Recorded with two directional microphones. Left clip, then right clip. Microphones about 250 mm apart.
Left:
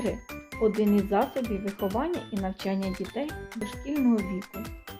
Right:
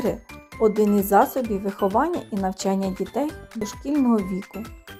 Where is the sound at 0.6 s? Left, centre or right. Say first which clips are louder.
Right 6 dB; right.